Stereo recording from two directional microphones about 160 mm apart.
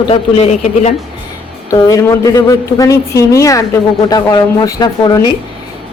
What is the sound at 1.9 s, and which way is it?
A woman's voice, 20° left (ahead or behind).